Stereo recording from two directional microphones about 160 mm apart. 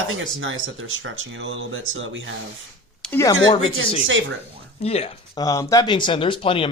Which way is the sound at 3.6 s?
40° left (ahead or behind).